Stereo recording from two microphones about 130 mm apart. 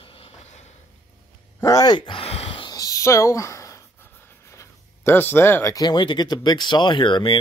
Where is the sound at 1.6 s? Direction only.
25° left (ahead or behind); by 2.7 s 45° left (ahead or behind).